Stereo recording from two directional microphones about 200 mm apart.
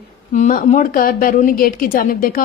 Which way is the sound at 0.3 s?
35° left (ahead or behind).